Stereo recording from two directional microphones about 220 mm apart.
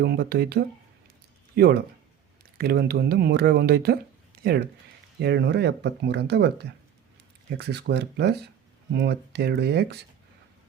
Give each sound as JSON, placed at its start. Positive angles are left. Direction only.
{"t": 0.0, "sound": "speech", "side_deg": -50}
{"t": 5.2, "sound": "speech", "side_deg": -50}